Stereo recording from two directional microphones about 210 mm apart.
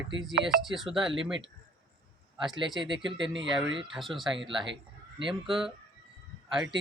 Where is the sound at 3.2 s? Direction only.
60° right (ahead or behind).